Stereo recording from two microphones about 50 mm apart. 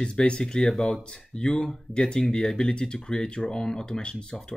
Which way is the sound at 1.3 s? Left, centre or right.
Centre.